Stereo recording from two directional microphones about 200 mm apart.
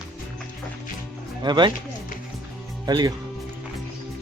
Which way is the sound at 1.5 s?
20° right (ahead or behind).